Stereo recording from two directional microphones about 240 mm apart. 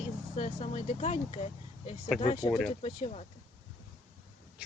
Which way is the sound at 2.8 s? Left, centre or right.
Left.